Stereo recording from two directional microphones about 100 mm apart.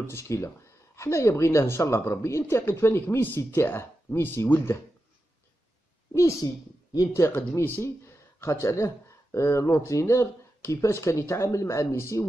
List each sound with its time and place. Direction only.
0.1 s a woman's voice: 30° left (ahead or behind)
6.4 s a woman's voice: 40° left (ahead or behind)
7.2 s a woman's voice: 25° left (ahead or behind)